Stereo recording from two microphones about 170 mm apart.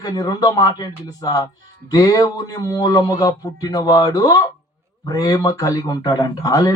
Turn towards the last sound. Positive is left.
turn(degrees=20)  # may be behind; listen again after turning